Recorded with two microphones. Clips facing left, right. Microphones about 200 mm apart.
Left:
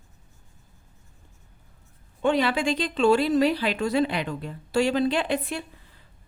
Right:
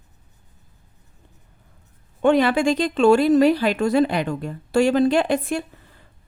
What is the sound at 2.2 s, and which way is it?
Speech, 50° right (ahead or behind).